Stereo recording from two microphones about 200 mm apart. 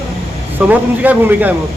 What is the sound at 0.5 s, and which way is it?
Speech, 10° right (ahead or behind).